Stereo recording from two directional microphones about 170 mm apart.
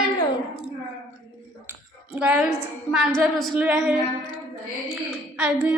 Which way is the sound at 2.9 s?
Centre (ahead or behind).